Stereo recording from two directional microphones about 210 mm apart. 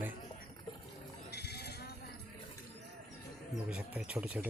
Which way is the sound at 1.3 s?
50° left (ahead or behind).